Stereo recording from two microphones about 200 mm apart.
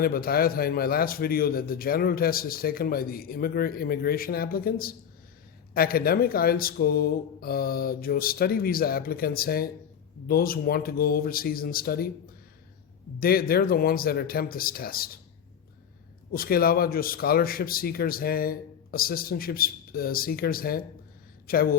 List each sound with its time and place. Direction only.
0.0 s a man's voice: 50° left (ahead or behind)
13.1 s a man's voice: 45° left (ahead or behind)
16.3 s a man's voice: 45° left (ahead or behind)